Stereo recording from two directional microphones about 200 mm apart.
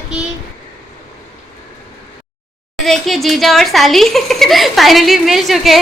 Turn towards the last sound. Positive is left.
turn(degrees=0)  # may be behind; listen again after turning